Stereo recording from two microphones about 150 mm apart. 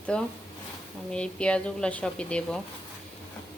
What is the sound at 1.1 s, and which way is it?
Speech, 5° left (ahead or behind).